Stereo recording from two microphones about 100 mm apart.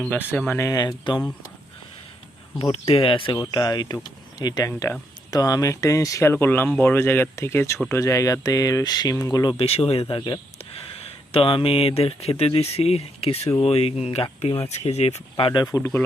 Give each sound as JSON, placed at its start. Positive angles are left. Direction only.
{"t": 0.1, "sound": "speech", "side_deg": 20}
{"t": 0.7, "sound": "speech", "side_deg": 40}
{"t": 2.8, "sound": "speech", "side_deg": 70}
{"t": 3.3, "sound": "speech", "side_deg": 40}
{"t": 6.2, "sound": "speech", "side_deg": 20}
{"t": 9.6, "sound": "speech", "side_deg": 90}
{"t": 10.2, "sound": "speech", "side_deg": 50}
{"t": 10.9, "sound": "speech", "side_deg": 75}
{"t": 15.7, "sound": "speech", "side_deg": 40}